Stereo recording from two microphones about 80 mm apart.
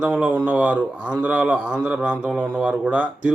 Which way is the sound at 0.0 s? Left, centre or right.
Centre.